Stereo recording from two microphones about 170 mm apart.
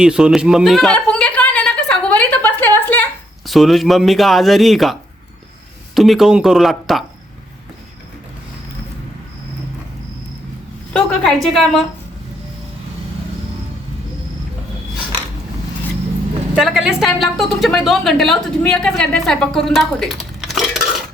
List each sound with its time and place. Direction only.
0.0 s a sound: 5° right (ahead or behind); by 3.0 s 10° left (ahead or behind)
3.4 s a woman's voice: centre (ahead or behind)
10.9 s a woman's voice: 5° left (ahead or behind)
16.6 s a woman's voice: centre (ahead or behind)